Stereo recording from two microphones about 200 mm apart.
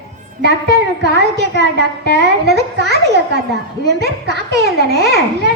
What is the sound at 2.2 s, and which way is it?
A child's voice, 55° right (ahead or behind).